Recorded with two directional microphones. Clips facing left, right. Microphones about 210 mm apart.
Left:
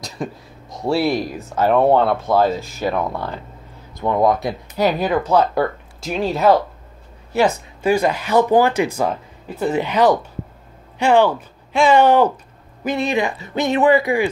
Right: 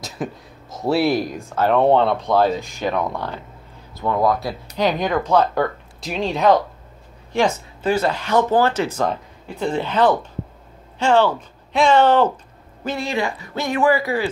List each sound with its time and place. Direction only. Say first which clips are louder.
0.0 s speech: even; 5° right (ahead or behind)
1.5 s speech: left 1 dB; 10° left (ahead or behind)
4.0 s speech: left 2 dB; 20° left (ahead or behind)
4.8 s speech: left 2 dB; 10° left (ahead or behind)